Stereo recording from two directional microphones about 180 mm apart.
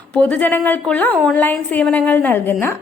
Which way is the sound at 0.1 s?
10° left (ahead or behind).